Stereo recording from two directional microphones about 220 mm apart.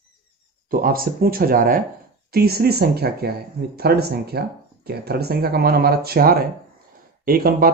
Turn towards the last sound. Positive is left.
turn(degrees=-40)  # may be behind; listen again after turning